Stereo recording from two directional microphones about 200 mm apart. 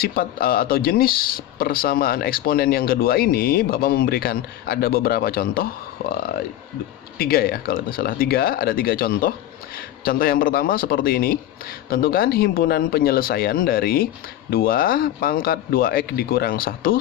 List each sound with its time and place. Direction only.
0.0 s speech: 45° left (ahead or behind)